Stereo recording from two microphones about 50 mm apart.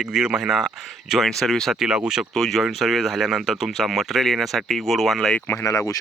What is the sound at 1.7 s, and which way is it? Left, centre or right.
Speech, centre.